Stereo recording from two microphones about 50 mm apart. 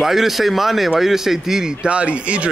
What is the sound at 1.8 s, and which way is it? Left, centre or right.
Speech, right.